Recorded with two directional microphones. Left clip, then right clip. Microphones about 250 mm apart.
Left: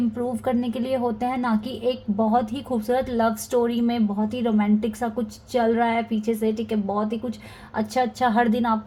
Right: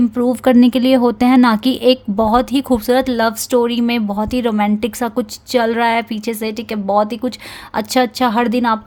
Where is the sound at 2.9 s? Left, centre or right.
Right.